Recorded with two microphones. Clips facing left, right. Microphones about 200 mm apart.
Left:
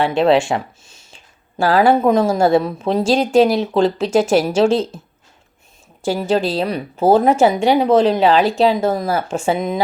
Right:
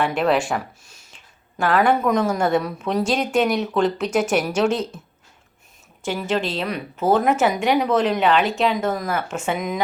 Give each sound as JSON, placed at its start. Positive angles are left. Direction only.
{"t": 0.0, "sound": "speech", "side_deg": 30}
{"t": 6.1, "sound": "speech", "side_deg": 35}